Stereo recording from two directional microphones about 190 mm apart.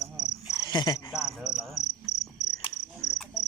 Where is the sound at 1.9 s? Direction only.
35° left (ahead or behind).